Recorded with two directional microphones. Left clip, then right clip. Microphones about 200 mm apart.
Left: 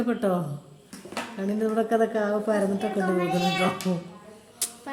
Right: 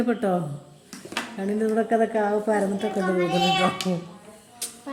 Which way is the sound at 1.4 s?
Centre (ahead or behind).